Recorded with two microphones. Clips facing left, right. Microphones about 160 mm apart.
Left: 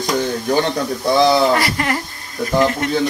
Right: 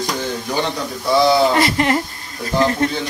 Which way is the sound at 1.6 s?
25° right (ahead or behind).